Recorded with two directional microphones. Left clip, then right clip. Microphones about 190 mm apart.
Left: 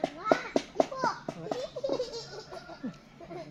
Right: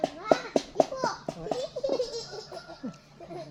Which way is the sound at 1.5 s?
40° right (ahead or behind).